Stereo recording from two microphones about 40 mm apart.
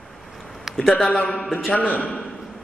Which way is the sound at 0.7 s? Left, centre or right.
Centre.